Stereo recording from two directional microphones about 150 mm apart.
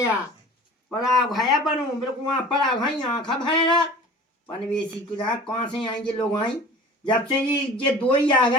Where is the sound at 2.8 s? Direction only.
30° left (ahead or behind).